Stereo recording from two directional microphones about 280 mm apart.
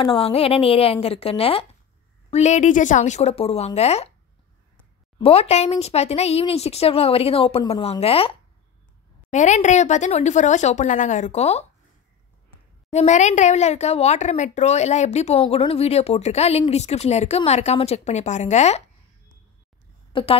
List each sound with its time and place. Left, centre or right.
0.0 s speech: centre
5.2 s speech: left
12.9 s speech: left
20.1 s a sound: centre